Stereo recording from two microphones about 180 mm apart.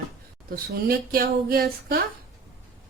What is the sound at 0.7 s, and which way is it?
Speech, 55° right (ahead or behind).